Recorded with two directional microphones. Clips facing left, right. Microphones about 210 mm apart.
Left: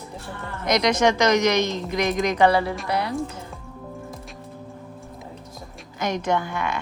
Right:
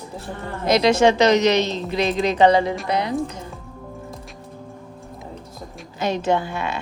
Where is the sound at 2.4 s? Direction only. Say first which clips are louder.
Right 4 dB; 20° right (ahead or behind).